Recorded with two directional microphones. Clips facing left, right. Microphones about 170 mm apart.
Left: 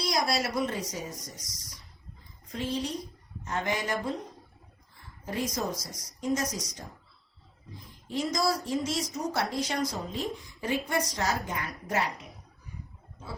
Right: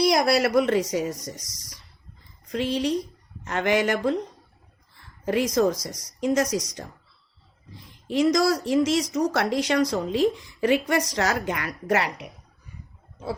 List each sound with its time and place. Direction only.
0.0 s speech: 75° right (ahead or behind)
2.5 s speech: 80° right
5.2 s speech: 80° right
8.0 s speech: 80° right